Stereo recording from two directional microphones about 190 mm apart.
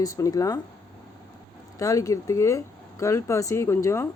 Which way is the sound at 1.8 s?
15° left (ahead or behind).